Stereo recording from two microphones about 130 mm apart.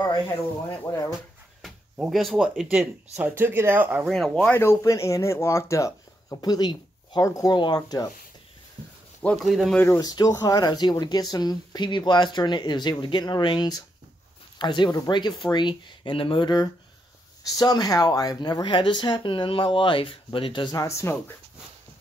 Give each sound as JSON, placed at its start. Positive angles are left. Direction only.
{"t": 0.8, "sound": "speech", "side_deg": 25}
{"t": 1.6, "sound": "speech", "side_deg": 0}
{"t": 4.1, "sound": "speech", "side_deg": 5}
{"t": 4.6, "sound": "speech", "side_deg": 20}
{"t": 9.2, "sound": "speech", "side_deg": 5}
{"t": 9.9, "sound": "speech", "side_deg": 30}
{"t": 20.7, "sound": "speech", "side_deg": 25}